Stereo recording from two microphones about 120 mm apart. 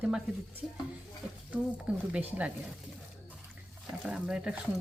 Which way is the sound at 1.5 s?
10° right (ahead or behind).